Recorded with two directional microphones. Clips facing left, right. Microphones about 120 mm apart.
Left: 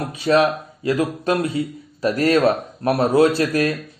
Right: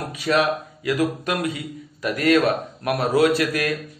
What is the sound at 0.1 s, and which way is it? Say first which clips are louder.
A man's voice: left 4 dB; 30° left (ahead or behind).